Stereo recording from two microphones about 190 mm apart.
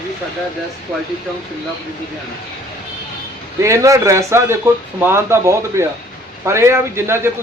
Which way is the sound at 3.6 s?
15° right (ahead or behind).